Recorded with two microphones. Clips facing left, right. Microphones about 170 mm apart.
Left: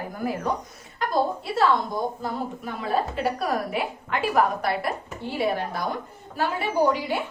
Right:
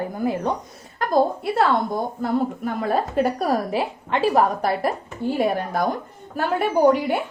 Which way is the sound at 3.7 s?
30° right (ahead or behind).